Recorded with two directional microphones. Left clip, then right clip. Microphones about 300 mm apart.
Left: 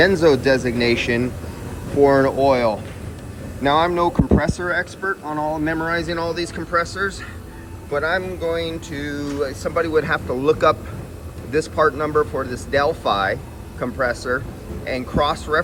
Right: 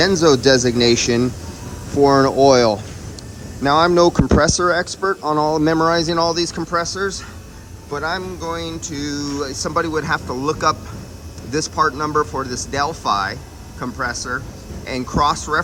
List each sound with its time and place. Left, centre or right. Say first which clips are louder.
0.0 s speech: right 1 dB; centre
5.2 s speech: right 6 dB; left
5.6 s speech: right 6 dB; centre